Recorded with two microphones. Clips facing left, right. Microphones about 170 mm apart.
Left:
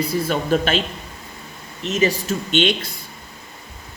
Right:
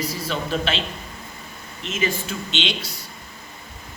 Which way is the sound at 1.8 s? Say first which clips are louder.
Left 6 dB; 40° left (ahead or behind).